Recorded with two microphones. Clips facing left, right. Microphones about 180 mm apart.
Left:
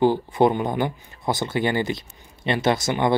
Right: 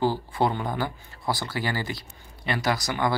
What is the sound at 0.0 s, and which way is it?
Speech, 20° left (ahead or behind).